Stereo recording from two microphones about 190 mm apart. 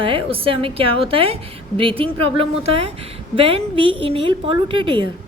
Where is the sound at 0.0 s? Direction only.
25° right (ahead or behind).